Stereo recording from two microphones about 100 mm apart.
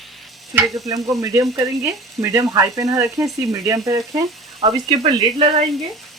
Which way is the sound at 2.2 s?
30° right (ahead or behind).